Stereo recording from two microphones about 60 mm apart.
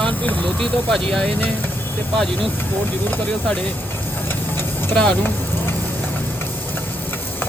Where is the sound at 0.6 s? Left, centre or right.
Centre.